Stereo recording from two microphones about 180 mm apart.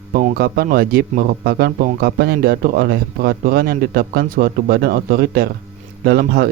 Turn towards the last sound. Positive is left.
turn(degrees=-60)  # may be behind; listen again after turning